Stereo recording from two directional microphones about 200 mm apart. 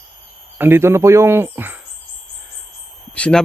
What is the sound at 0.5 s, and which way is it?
Speech, 10° right (ahead or behind).